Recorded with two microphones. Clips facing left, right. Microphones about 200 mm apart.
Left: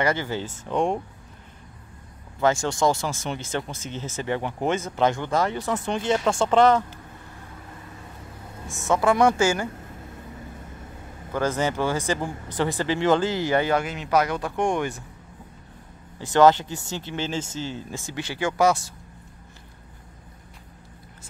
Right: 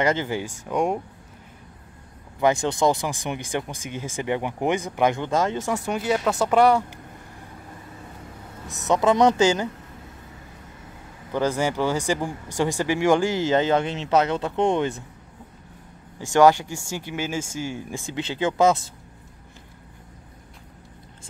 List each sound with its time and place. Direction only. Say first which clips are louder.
0.0 s speech: right 2 dB; 20° right (ahead or behind)
2.4 s speech: right 1 dB; 20° right (ahead or behind)
8.6 s a woman's voice: right 1 dB; 20° right (ahead or behind)
11.3 s speech: right 1 dB; 15° right (ahead or behind)
16.3 s speech: even; 15° right (ahead or behind)